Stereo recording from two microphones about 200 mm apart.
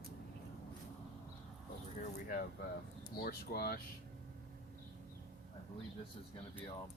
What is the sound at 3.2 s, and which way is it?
Speech, 50° left (ahead or behind).